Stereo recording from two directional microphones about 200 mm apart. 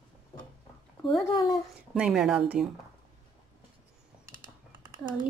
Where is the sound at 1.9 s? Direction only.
5° right (ahead or behind).